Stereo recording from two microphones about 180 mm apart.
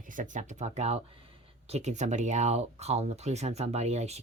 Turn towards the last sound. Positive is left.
turn(degrees=-35)  # may be behind; listen again after turning